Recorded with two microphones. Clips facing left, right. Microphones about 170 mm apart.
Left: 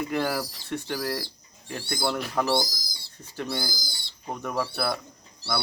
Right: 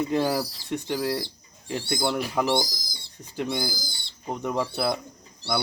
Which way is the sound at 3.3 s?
15° right (ahead or behind).